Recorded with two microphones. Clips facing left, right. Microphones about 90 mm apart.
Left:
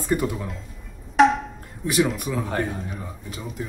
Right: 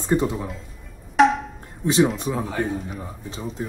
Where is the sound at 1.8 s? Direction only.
25° right (ahead or behind).